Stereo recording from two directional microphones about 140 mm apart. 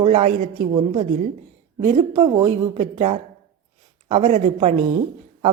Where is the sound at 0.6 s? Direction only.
35° right (ahead or behind).